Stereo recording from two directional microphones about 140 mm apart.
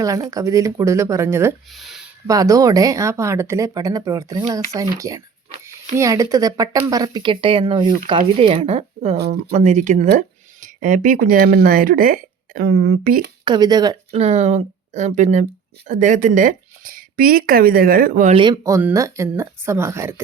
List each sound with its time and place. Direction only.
0.0 s speech: 25° right (ahead or behind)
1.7 s a sound: centre (ahead or behind)
2.2 s speech: 25° right (ahead or behind); by 13.2 s 85° right
13.4 s speech: 30° right (ahead or behind)
14.1 s speech: 50° right (ahead or behind); by 18.3 s 90° right
18.3 s speech: 30° right (ahead or behind)